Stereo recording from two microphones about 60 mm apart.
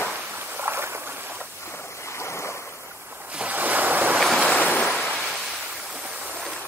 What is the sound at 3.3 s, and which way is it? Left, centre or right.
Waves, right.